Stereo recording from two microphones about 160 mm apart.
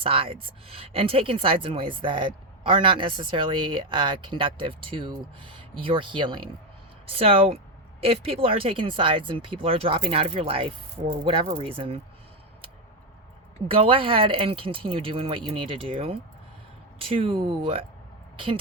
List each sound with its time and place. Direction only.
0.0 s a woman's voice: 35° right (ahead or behind)
13.7 s a woman's voice: 35° right (ahead or behind)